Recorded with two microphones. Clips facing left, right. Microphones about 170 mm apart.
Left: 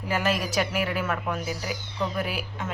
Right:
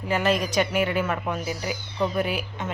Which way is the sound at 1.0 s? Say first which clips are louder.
Right 1 dB; 15° right (ahead or behind).